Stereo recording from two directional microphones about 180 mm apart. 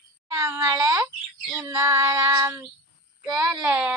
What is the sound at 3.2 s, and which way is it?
Speech, 20° right (ahead or behind).